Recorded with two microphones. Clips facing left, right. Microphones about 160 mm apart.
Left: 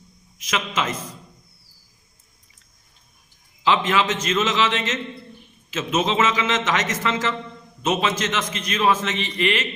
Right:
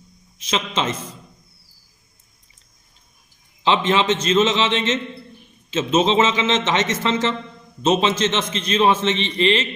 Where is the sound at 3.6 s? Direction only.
25° right (ahead or behind).